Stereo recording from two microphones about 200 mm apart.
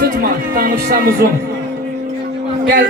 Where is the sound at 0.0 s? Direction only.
45° right (ahead or behind).